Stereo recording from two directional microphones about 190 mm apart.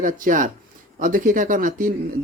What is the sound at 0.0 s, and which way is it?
Speech, 45° right (ahead or behind).